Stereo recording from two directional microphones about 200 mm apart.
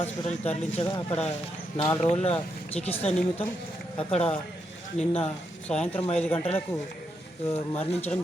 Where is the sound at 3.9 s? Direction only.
30° left (ahead or behind).